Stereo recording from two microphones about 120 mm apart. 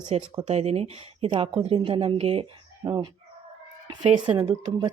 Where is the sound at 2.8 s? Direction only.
40° right (ahead or behind).